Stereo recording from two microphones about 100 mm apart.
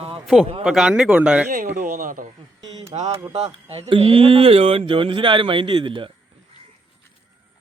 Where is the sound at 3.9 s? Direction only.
70° right (ahead or behind).